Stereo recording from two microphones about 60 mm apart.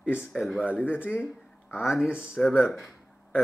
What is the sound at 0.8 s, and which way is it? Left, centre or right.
Speech, left.